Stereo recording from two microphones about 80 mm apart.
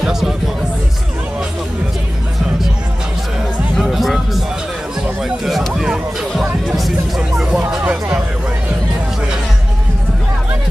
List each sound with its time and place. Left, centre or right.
0.0 s music: centre
3.7 s music: centre
5.4 s a sound: centre
5.7 s music: centre